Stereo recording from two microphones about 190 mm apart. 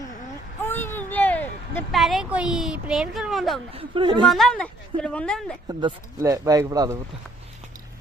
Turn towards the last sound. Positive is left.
turn(degrees=-20)  # may be behind; listen again after turning